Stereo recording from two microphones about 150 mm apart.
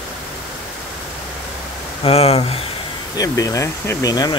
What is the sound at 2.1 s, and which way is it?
Speech, 40° left (ahead or behind).